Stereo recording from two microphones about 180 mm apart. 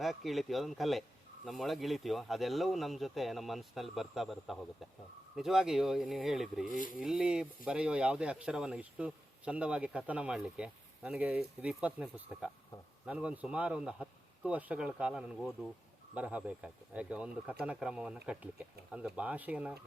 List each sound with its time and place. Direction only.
0.0 s speech: centre (ahead or behind)
6.7 s speech: 45° left (ahead or behind)
6.9 s a man's voice: 5° right (ahead or behind)